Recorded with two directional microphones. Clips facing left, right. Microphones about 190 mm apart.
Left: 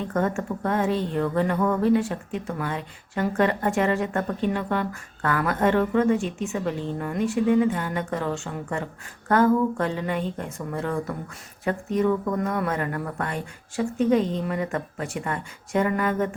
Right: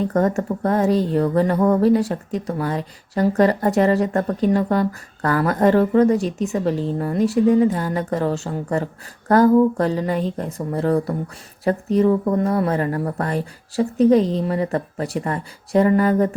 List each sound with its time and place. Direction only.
0.0 s speech: 40° right (ahead or behind)